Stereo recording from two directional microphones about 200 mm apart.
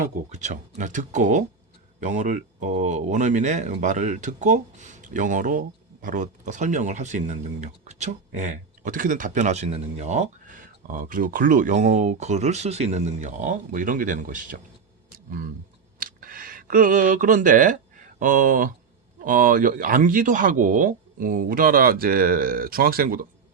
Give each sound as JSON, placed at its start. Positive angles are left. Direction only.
{"t": 0.3, "sound": "speech", "side_deg": -35}
{"t": 16.0, "sound": "a sound", "side_deg": -45}
{"t": 18.2, "sound": "speech", "side_deg": -40}